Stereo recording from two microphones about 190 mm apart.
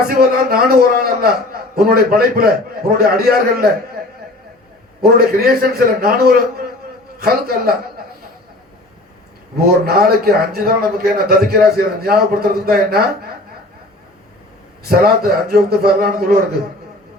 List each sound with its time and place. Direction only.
0.1 s a man's voice: 55° right (ahead or behind)
5.0 s a man's voice: 55° right (ahead or behind)
9.6 s a man's voice: 55° right (ahead or behind)
14.8 s a man's voice: 55° right (ahead or behind)